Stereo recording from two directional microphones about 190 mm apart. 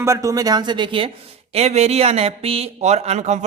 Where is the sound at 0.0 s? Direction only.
15° right (ahead or behind).